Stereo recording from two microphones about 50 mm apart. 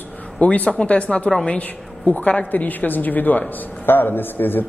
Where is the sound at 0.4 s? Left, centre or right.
Left.